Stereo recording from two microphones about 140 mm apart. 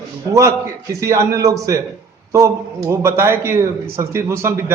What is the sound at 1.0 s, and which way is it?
A man's voice, 20° right (ahead or behind).